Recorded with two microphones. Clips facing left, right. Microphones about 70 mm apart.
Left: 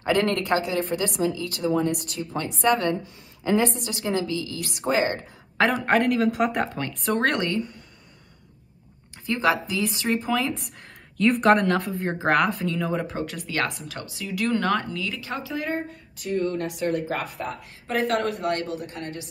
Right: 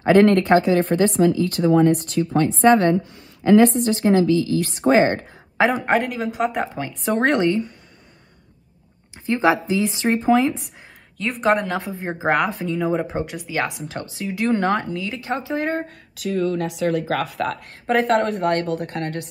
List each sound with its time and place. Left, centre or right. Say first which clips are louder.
0.0 s speech: right 9 dB; right
3.4 s a woman's voice: right 9 dB; right
3.9 s speech: right 10 dB; right
5.6 s speech: right 2 dB; centre
7.1 s speech: right 5 dB; right
9.2 s speech: right 4 dB; right
11.1 s speech: left 1 dB; centre
12.6 s speech: right 4 dB; centre
13.4 s speech: even; centre
13.8 s speech: right 5 dB; right
17.3 s speech: right 7 dB; right
17.6 s speech: right 5 dB; right